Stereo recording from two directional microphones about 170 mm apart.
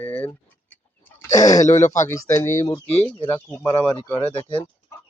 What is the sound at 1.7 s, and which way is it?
Speech, 15° left (ahead or behind).